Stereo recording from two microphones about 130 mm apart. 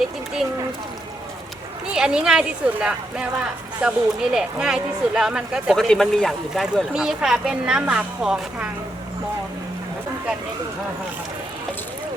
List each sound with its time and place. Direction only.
1.9 s speech: 5° right (ahead or behind)